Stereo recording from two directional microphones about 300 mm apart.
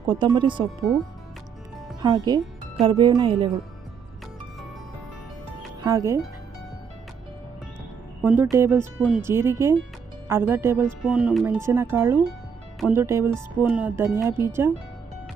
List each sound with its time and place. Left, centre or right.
0.2 s speech: centre
0.9 s speech: centre
2.0 s speech: centre
5.8 s speech: centre
8.2 s speech: centre